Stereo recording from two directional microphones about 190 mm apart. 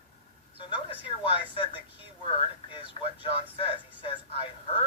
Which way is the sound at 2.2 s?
25° left (ahead or behind).